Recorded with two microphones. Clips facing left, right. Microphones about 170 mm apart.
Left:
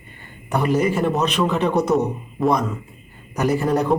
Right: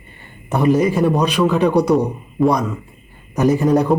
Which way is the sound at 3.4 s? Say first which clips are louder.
Right 5 dB; 20° right (ahead or behind).